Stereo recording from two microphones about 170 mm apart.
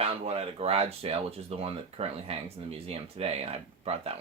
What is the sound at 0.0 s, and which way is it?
Speech, 35° right (ahead or behind).